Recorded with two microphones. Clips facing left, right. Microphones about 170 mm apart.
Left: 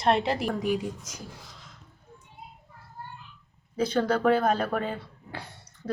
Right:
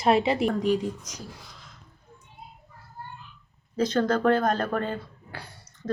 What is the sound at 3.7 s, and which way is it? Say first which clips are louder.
A woman's voice: right 1 dB; 10° left (ahead or behind).